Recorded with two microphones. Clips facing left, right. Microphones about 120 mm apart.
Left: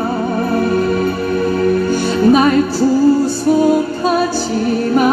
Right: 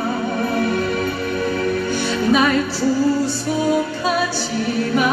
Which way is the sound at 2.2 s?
40° left (ahead or behind).